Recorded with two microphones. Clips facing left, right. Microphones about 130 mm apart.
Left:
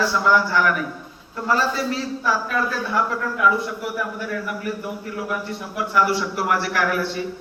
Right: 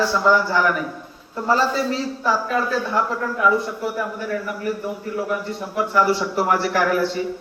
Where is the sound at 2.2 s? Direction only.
30° right (ahead or behind).